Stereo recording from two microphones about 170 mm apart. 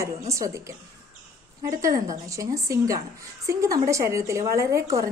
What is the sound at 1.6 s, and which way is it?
A woman's voice, 20° right (ahead or behind).